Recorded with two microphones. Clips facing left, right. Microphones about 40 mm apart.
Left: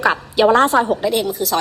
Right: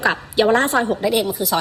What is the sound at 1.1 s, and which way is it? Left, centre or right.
Speech, centre.